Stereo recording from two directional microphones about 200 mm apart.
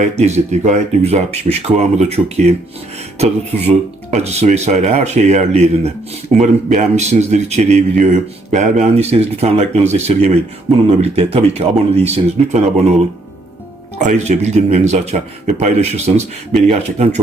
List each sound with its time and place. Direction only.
0.0 s speech: 35° right (ahead or behind)
14.0 s speech: 35° right (ahead or behind)